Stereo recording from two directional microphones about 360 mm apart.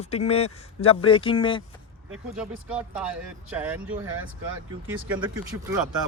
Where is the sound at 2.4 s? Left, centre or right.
Centre.